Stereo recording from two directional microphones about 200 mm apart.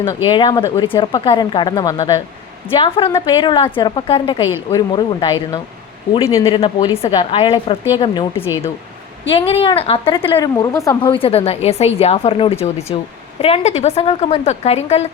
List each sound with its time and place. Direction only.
0.3 s a woman's voice: 25° left (ahead or behind)
9.3 s a woman's voice: 25° left (ahead or behind)